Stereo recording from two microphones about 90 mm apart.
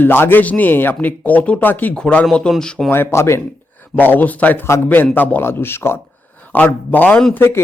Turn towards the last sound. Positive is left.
turn(degrees=25)  # may be behind; listen again after turning